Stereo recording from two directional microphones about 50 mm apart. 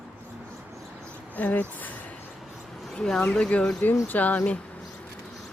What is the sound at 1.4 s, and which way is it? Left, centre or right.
Speech, left.